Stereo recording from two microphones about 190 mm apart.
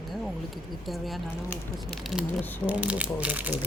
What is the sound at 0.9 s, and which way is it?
Speech, centre (ahead or behind).